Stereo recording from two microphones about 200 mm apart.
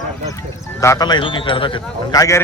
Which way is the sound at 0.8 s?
15° left (ahead or behind).